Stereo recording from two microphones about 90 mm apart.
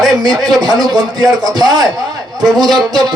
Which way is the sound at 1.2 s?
45° right (ahead or behind).